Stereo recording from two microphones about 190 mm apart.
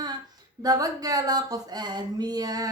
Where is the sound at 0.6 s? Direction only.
20° right (ahead or behind).